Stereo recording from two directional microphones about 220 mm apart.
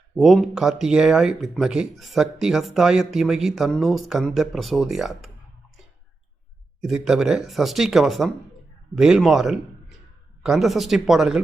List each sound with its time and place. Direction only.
0.2 s speech: centre (ahead or behind)
6.8 s speech: centre (ahead or behind)